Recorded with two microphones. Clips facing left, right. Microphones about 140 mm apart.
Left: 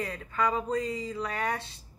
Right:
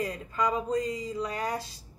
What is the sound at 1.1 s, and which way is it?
Speech, 35° right (ahead or behind).